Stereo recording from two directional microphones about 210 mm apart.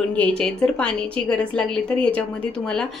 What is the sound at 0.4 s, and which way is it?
A woman's voice, 5° left (ahead or behind).